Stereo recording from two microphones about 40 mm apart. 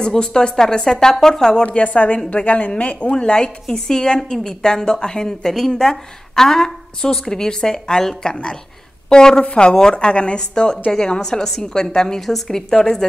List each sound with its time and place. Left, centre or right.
0.0 s a woman's voice: centre
1.6 s a woman's voice: left
3.1 s a woman's voice: left
9.4 s a woman's voice: left